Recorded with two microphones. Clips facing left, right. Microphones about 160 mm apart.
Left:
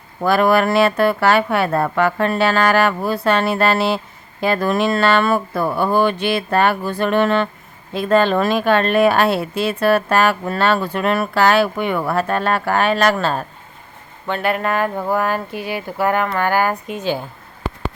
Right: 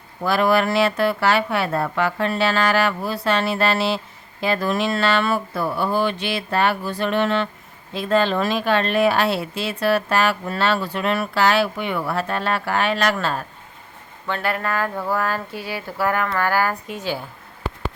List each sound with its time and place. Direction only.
0.2 s speech: 50° left (ahead or behind); by 13.4 s 35° left (ahead or behind)
14.3 s speech: 20° left (ahead or behind)